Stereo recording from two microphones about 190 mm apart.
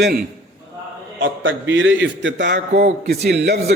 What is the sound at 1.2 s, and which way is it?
A man's voice, 85° right.